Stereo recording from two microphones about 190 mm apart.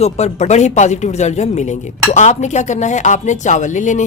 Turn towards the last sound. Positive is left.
turn(degrees=40)  # may be behind; listen again after turning